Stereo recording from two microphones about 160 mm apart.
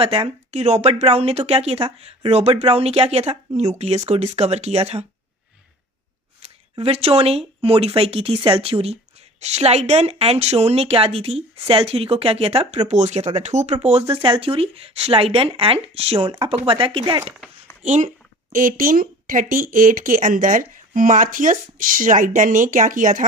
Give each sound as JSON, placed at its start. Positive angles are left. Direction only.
{"t": 0.0, "sound": "speech", "side_deg": -35}
{"t": 6.4, "sound": "speech", "side_deg": -40}
{"t": 14.1, "sound": "speech", "side_deg": -30}
{"t": 17.8, "sound": "speech", "side_deg": -45}
{"t": 18.5, "sound": "speech", "side_deg": -60}